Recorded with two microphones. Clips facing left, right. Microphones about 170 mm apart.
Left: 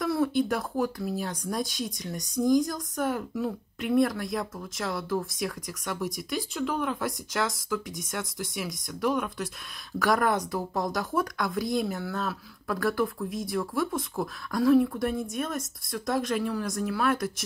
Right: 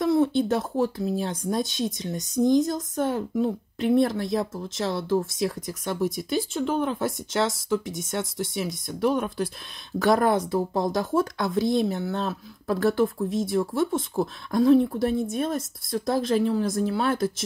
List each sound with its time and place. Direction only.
0.0 s speech: 25° right (ahead or behind)